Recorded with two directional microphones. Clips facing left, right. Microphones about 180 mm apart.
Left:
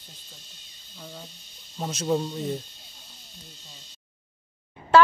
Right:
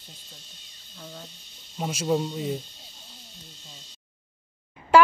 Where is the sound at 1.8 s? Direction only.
5° right (ahead or behind).